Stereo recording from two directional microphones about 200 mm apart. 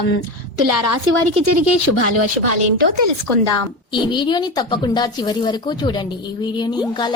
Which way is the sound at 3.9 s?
25° left (ahead or behind).